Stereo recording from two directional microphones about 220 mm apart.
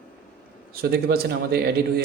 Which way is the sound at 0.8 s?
45° right (ahead or behind).